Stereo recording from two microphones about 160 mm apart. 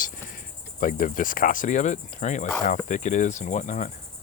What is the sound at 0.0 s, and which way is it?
Cricket, 55° left (ahead or behind).